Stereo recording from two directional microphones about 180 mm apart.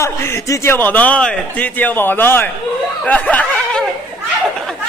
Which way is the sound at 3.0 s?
10° left (ahead or behind).